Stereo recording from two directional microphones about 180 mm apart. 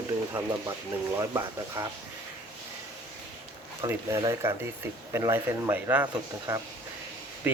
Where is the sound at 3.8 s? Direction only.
15° right (ahead or behind).